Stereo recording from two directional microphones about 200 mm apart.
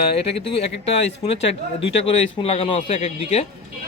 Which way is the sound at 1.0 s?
30° left (ahead or behind).